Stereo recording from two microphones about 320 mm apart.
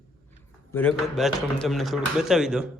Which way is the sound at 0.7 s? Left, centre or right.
Centre.